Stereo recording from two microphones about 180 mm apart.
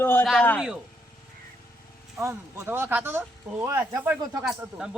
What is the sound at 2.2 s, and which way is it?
Speech, 15° right (ahead or behind).